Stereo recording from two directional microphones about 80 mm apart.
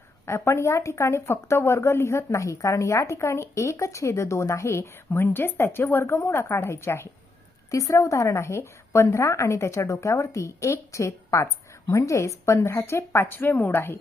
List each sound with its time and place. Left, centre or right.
0.3 s speech: left
7.7 s speech: left